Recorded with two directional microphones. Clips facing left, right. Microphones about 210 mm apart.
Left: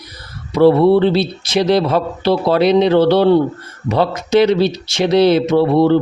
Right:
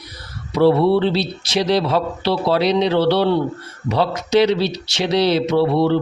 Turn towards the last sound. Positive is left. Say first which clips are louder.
# left 4 dB
turn(degrees=50)  # may be behind; listen again after turning